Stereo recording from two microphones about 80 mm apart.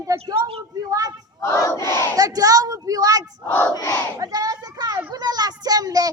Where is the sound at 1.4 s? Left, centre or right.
Left.